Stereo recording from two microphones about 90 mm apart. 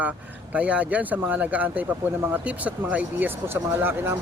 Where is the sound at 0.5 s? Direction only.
15° right (ahead or behind).